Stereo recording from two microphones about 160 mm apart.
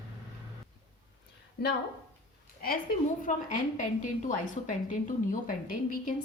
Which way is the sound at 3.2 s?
55° left (ahead or behind).